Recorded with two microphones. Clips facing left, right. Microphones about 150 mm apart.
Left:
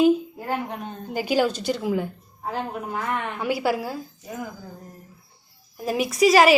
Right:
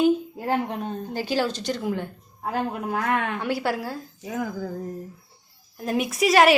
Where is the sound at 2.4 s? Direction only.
60° right (ahead or behind).